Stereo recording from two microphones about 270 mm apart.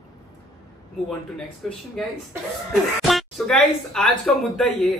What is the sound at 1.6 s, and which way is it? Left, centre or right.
A man's voice, centre.